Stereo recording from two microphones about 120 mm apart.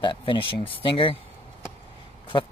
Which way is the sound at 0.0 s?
45° left (ahead or behind).